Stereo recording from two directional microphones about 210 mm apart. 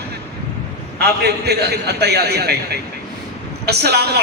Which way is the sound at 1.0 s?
50° right (ahead or behind).